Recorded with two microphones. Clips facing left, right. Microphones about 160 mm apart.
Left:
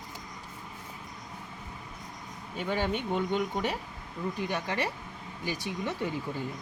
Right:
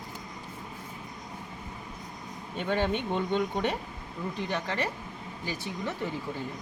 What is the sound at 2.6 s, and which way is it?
Speech, 10° left (ahead or behind).